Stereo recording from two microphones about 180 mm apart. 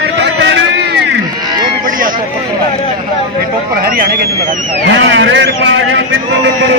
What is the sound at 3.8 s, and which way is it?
Speech, 55° right (ahead or behind).